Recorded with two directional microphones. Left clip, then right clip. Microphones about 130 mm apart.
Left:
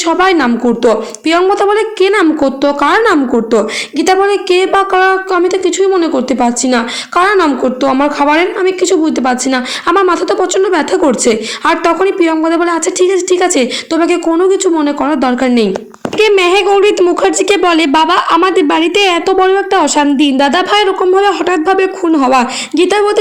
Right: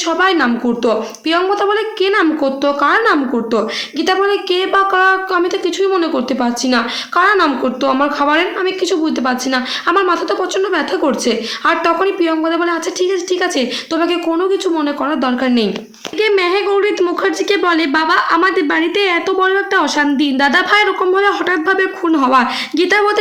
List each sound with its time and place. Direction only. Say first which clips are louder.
0.1 s a woman's voice: left 4 dB; 50° left (ahead or behind); by 23.2 s 25° left (ahead or behind)